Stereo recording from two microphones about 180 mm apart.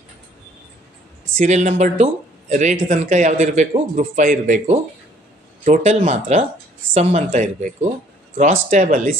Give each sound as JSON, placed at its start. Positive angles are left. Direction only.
{"t": 1.4, "sound": "a man's voice", "side_deg": -40}